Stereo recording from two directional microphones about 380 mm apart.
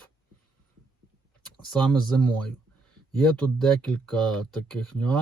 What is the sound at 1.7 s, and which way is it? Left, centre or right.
Speech, centre.